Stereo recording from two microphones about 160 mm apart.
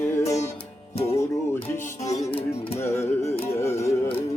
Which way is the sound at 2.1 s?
45° left (ahead or behind).